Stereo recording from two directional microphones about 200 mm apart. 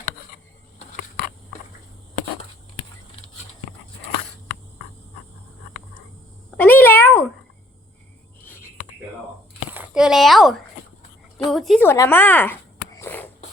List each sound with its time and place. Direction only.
6.6 s cat: 10° left (ahead or behind)
8.4 s whispering: 10° left (ahead or behind)
9.7 s speech: 5° right (ahead or behind)
11.5 s a woman's voice: centre (ahead or behind)
11.9 s a sound: 10° left (ahead or behind)